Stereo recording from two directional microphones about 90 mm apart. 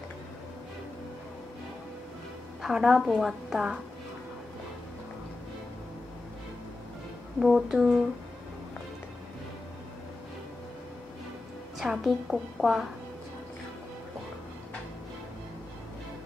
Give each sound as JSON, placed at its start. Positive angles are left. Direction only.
{"t": 2.6, "sound": "a woman's voice", "side_deg": -5}
{"t": 7.3, "sound": "a woman's voice", "side_deg": -5}
{"t": 11.8, "sound": "a woman's voice", "side_deg": -5}